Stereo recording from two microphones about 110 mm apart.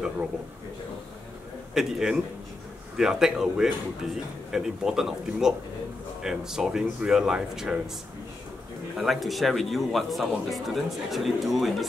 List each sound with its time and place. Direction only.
1.7 s a man's voice: 5° right (ahead or behind)
8.9 s a man's voice: centre (ahead or behind)